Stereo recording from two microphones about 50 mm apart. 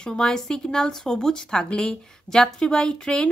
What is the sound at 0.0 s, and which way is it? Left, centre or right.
Speech, centre.